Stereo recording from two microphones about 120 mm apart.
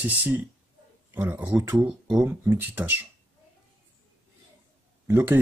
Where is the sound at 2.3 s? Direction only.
15° right (ahead or behind).